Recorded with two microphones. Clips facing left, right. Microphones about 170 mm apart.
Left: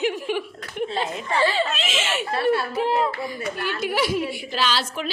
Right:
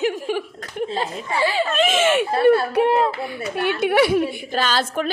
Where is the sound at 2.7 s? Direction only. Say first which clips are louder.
Right 5 dB; 65° right (ahead or behind).